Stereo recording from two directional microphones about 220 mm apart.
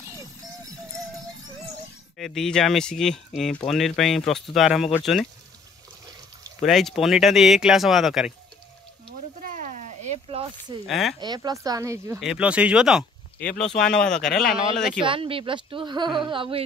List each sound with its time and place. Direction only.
2.1 s speech: centre (ahead or behind)
6.6 s speech: centre (ahead or behind)
9.4 s a sound: 35° right (ahead or behind)
10.9 s speech: centre (ahead or behind)
11.1 s speech: 20° right (ahead or behind)
12.2 s speech: 5° right (ahead or behind)
15.0 s speech: 25° right (ahead or behind)